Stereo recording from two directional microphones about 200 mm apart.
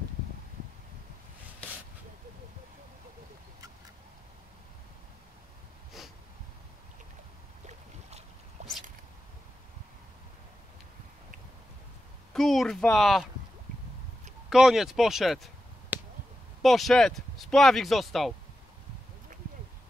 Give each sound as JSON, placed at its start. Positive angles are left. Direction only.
{"t": 6.0, "sound": "snort", "side_deg": 0}
{"t": 8.6, "sound": "a sound", "side_deg": -35}
{"t": 12.3, "sound": "speech", "side_deg": 0}
{"t": 14.5, "sound": "speech", "side_deg": 0}